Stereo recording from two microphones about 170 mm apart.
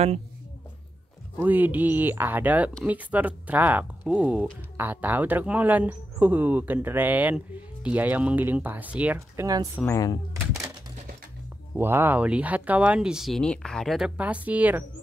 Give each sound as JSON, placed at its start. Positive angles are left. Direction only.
{"t": 1.4, "sound": "speech", "side_deg": -10}
{"t": 9.8, "sound": "speech", "side_deg": 15}
{"t": 11.7, "sound": "speech", "side_deg": -10}